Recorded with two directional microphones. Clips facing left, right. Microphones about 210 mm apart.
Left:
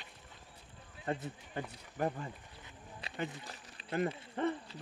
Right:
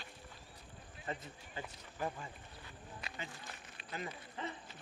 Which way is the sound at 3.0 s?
30° left (ahead or behind).